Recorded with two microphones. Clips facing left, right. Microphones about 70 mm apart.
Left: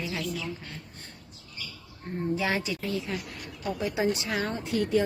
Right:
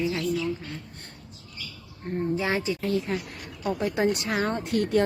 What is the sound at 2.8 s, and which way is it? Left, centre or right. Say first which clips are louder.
Speech: right 5 dB; right.